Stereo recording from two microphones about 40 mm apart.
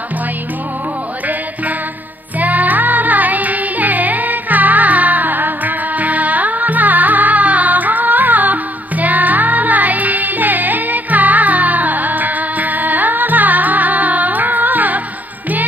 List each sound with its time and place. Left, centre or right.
2.3 s music: right